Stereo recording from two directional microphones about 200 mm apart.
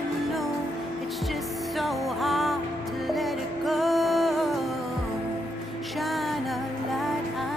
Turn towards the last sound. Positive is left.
turn(degrees=0)  # may be behind; listen again after turning